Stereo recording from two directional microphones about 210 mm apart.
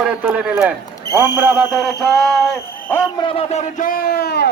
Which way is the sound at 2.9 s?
15° left (ahead or behind).